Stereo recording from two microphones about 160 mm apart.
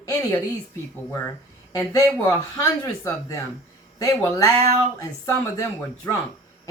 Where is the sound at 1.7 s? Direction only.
15° left (ahead or behind).